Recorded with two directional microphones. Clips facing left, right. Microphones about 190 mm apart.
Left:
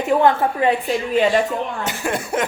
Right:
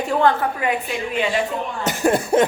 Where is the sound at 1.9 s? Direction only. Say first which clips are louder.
Right 5 dB; 35° right (ahead or behind).